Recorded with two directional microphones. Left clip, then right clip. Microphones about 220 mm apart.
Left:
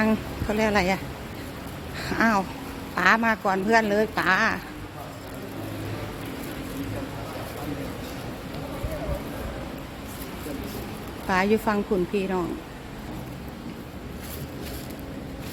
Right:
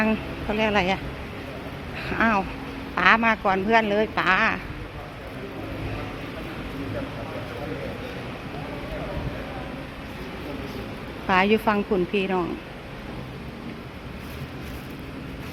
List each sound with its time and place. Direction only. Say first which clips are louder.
0.0 s speech: even; 15° left (ahead or behind)
2.0 s speech: right 1 dB; 15° left (ahead or behind)
11.3 s a woman's voice: right 3 dB; 5° left (ahead or behind)